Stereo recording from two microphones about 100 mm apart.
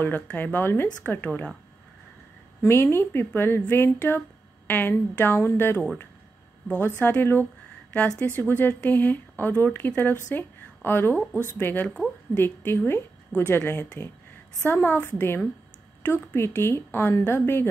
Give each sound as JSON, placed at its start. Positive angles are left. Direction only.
{"t": 0.0, "sound": "speech", "side_deg": 20}
{"t": 2.6, "sound": "speech", "side_deg": 25}
{"t": 7.0, "sound": "a woman's voice", "side_deg": 20}